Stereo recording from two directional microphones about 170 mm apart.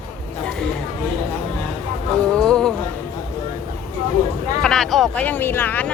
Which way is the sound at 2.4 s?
5° left (ahead or behind).